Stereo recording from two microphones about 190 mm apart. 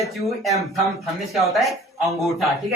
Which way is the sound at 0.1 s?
Centre (ahead or behind).